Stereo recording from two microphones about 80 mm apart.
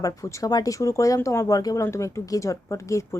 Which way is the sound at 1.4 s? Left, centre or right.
Left.